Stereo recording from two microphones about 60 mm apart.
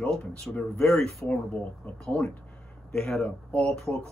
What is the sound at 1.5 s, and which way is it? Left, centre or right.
Speech, left.